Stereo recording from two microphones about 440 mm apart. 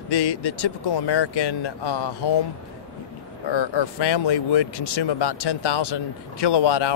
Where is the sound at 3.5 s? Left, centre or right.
Left.